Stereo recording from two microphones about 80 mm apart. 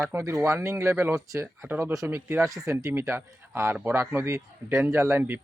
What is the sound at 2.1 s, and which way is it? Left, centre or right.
Speech, right.